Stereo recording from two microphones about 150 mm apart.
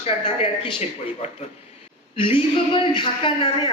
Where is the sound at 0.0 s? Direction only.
45° left (ahead or behind).